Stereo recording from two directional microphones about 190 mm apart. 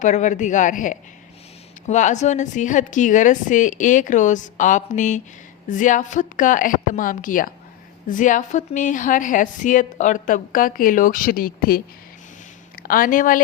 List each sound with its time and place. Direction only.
0.0 s a woman's voice: 40° left (ahead or behind)
12.8 s speech: 50° left (ahead or behind)